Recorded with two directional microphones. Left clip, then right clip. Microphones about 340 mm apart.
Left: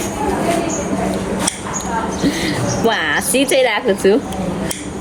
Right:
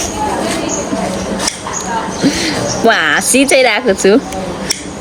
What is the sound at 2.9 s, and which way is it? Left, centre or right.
Speech, centre.